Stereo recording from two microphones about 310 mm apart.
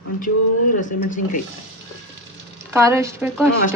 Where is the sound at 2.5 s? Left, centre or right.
Centre.